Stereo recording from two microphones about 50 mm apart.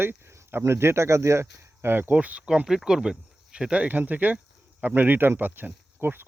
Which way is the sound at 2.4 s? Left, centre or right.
Centre.